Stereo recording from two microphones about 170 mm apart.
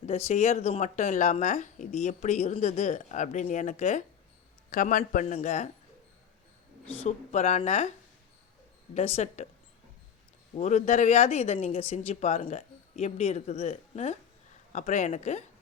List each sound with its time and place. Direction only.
0.3 s speech: 40° left (ahead or behind)
7.0 s speech: 40° left (ahead or behind)
9.0 s speech: 40° left (ahead or behind)
10.6 s speech: 45° left (ahead or behind)